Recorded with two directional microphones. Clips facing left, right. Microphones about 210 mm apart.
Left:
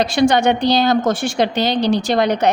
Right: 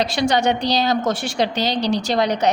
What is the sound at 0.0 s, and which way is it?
A woman's voice, 50° left (ahead or behind).